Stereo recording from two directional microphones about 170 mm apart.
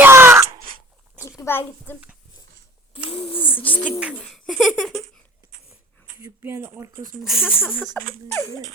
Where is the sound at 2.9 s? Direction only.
30° left (ahead or behind).